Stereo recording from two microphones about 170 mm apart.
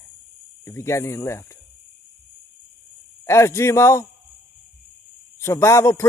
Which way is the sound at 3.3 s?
15° left (ahead or behind).